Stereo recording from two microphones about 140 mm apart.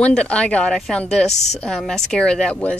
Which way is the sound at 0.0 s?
10° left (ahead or behind).